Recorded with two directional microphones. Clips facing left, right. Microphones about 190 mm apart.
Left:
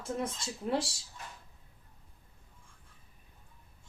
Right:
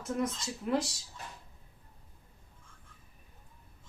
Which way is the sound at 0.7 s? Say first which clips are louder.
Right 1 dB; 30° left (ahead or behind).